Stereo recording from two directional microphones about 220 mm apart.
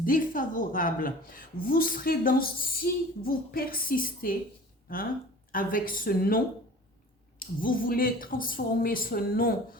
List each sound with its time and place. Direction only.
0.0 s a woman's voice: 40° left (ahead or behind)
5.5 s a woman's voice: 40° left (ahead or behind)